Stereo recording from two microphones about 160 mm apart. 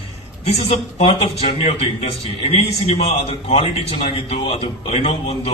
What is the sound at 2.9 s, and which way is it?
A man's voice, 40° left (ahead or behind).